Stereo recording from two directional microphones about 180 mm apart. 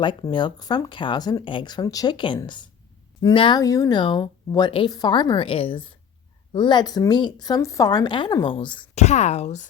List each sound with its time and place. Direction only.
0.0 s speech: 25° left (ahead or behind)
9.0 s speech: 40° left (ahead or behind)